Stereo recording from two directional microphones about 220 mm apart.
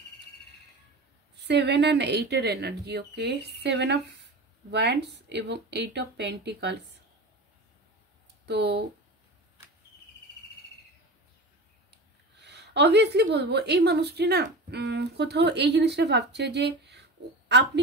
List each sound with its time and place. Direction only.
1.4 s speech: 50° right (ahead or behind)
8.5 s speech: 50° right (ahead or behind)
11.9 s speech: 50° right (ahead or behind)